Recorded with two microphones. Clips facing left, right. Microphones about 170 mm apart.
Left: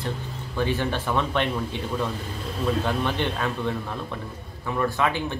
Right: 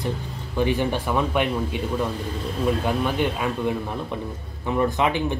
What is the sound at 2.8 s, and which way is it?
A man's voice, 10° right (ahead or behind).